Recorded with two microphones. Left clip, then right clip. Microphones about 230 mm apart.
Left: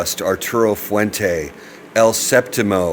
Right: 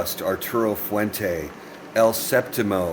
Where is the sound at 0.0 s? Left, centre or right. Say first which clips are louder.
Left 6 dB; left.